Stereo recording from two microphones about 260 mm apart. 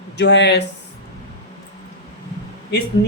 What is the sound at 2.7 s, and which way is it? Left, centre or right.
Speech, left.